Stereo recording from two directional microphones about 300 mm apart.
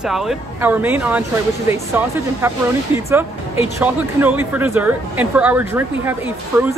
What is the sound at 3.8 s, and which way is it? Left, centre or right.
Speech, centre.